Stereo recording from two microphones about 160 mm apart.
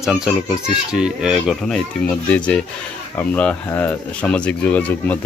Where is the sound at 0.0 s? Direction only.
Centre (ahead or behind).